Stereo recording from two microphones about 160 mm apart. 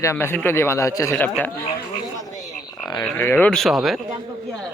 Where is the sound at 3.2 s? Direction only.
10° left (ahead or behind).